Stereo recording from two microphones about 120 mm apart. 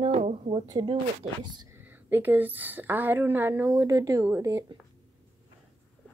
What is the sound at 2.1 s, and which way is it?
A woman's voice, 15° right (ahead or behind).